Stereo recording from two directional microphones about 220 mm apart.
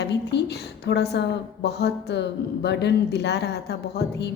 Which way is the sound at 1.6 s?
50° left (ahead or behind).